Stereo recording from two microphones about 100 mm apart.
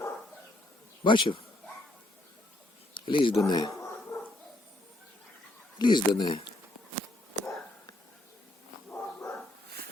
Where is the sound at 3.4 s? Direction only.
45° left (ahead or behind).